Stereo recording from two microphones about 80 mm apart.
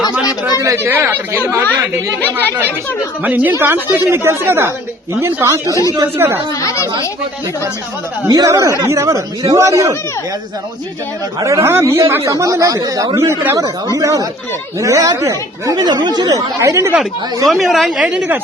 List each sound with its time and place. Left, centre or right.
0.6 s a man's voice: right
2.2 s speech: left
3.2 s a woman's voice: centre; by 5.8 s right
6.1 s a woman's voice: right
6.6 s speech: left
8.3 s a man's voice: right
11.3 s speech: right
11.6 s a man's voice: right
15.7 s speech: right
16.3 s a man's voice: right
17.5 s speech: centre
18.0 s a woman's voice: centre